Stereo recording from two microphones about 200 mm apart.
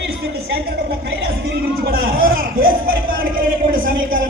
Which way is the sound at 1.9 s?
45° right (ahead or behind).